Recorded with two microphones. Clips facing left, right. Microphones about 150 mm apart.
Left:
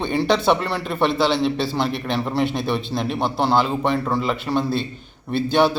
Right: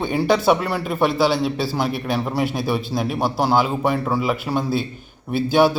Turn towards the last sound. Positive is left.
turn(degrees=-5)  # may be behind; listen again after turning